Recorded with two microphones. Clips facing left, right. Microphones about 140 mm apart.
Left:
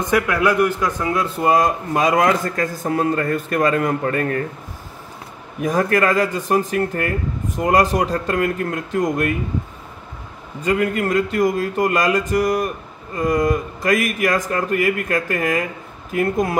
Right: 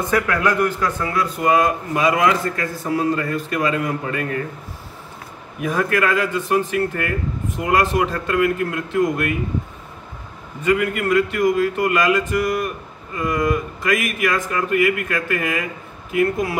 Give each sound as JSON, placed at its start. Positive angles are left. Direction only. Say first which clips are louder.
{"t": 0.0, "sound": "a man's voice", "louder": "left 2 dB", "side_deg": 15}
{"t": 2.0, "sound": "a man's voice", "louder": "left 1 dB", "side_deg": 45}
{"t": 5.6, "sound": "speech", "louder": "left 2 dB", "side_deg": 40}
{"t": 10.6, "sound": "a man's voice", "louder": "even", "side_deg": 40}